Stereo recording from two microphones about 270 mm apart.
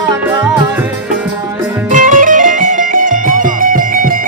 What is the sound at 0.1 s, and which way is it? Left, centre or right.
Music, centre.